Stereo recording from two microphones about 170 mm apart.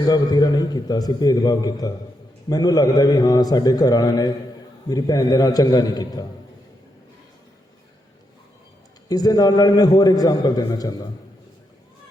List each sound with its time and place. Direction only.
0.1 s a man's voice: 25° left (ahead or behind)
9.0 s a man's voice: 20° left (ahead or behind)